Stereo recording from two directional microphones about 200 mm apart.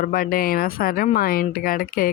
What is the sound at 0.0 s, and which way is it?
Speech, 45° left (ahead or behind).